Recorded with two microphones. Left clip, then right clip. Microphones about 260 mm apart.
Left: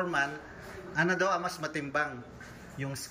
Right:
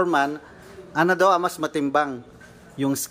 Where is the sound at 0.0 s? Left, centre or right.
Centre.